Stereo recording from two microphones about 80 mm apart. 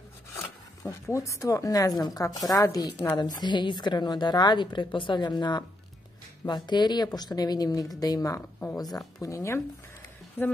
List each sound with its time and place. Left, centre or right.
0.4 s speech: left
3.2 s a woman's voice: left